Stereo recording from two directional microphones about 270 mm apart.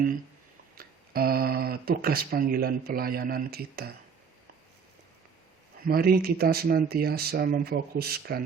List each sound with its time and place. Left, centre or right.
0.8 s speech: right
5.8 s speech: right